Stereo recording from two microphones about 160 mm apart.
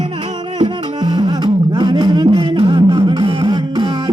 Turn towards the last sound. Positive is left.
turn(degrees=-30)  # may be behind; listen again after turning